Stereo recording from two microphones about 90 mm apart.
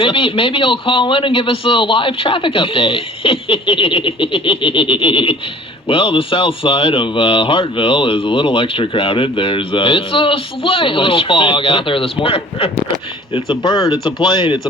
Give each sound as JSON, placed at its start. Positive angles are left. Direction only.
{"t": 0.0, "sound": "speech", "side_deg": 75}
{"t": 13.6, "sound": "speech", "side_deg": 65}